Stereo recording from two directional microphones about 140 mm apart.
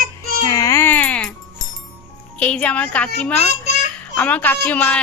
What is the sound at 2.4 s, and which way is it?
A woman's voice, 10° left (ahead or behind).